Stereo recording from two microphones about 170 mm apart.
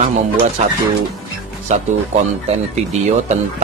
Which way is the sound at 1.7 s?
45° right (ahead or behind).